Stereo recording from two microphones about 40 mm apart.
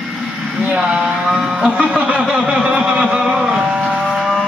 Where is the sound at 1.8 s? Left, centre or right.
Right.